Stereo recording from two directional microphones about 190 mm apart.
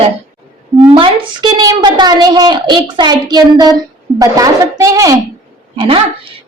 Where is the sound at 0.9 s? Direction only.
25° right (ahead or behind).